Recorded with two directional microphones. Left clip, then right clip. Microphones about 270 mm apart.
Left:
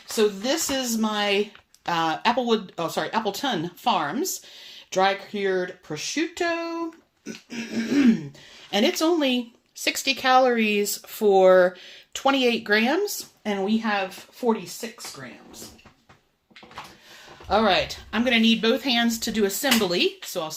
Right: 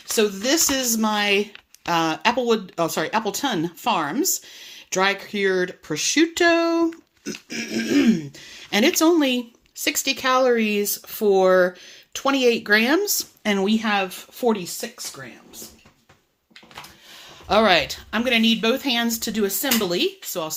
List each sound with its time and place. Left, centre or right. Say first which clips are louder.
0.1 s speech: right 2 dB; right
7.3 s dog: right 5 dB; right
8.4 s speech: right 2 dB; right
17.5 s speech: right 4 dB; right